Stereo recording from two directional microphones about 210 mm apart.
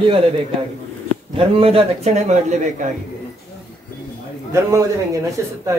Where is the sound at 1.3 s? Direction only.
25° right (ahead or behind).